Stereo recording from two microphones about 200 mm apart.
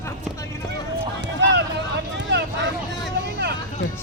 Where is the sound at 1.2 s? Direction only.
60° right (ahead or behind).